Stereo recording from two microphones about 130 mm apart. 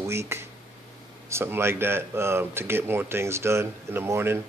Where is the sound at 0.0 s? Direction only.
20° right (ahead or behind).